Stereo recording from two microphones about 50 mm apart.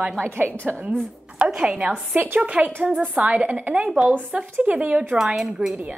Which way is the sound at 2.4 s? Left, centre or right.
Right.